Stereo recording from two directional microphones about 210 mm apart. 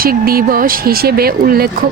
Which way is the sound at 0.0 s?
45° right (ahead or behind).